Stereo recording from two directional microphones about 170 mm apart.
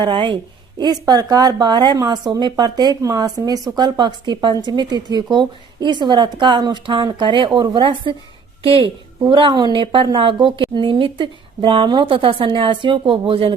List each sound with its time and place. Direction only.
0.0 s a woman's voice: 30° right (ahead or behind)